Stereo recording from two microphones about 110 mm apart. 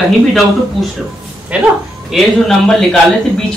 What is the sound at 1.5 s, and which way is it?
Speech, 10° right (ahead or behind).